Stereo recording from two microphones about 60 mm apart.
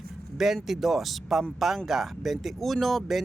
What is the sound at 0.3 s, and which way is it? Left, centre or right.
Speech, centre.